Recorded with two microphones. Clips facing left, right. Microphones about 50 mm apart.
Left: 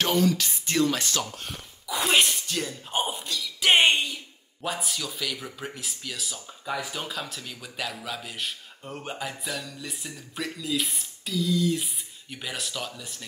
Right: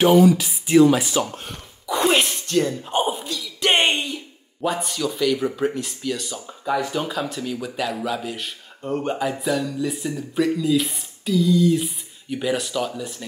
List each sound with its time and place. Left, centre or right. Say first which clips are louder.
0.0 s speech: right 9 dB; centre
1.4 s speech: right 3 dB; centre
2.9 s a sound: right 6 dB; centre
4.6 s speech: right 8 dB; centre